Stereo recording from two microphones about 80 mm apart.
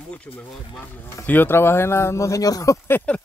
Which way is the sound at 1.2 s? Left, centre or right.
Left.